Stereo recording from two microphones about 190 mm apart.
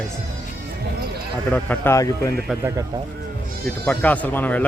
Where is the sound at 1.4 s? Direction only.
10° left (ahead or behind).